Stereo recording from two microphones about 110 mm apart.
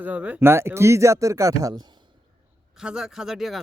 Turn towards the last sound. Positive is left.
turn(degrees=0)  # may be behind; listen again after turning